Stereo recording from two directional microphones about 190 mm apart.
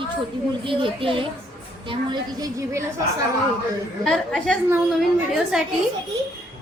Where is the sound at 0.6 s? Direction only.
25° right (ahead or behind).